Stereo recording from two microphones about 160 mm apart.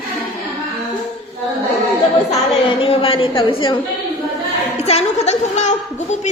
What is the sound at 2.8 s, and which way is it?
Speech, 35° left (ahead or behind).